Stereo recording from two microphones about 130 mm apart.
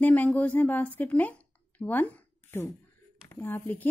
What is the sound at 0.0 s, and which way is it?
Speech, 10° left (ahead or behind).